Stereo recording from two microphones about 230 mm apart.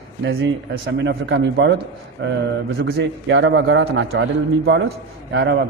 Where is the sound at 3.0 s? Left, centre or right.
Right.